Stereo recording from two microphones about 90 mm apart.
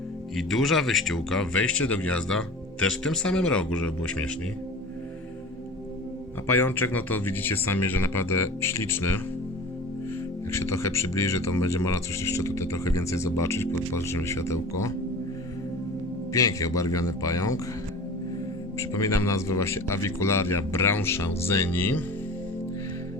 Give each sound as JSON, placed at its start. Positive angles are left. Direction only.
{"t": 0.3, "sound": "speech", "side_deg": 0}
{"t": 6.5, "sound": "speech", "side_deg": 25}
{"t": 10.5, "sound": "speech", "side_deg": 30}
{"t": 16.3, "sound": "speech", "side_deg": 40}
{"t": 18.8, "sound": "speech", "side_deg": 35}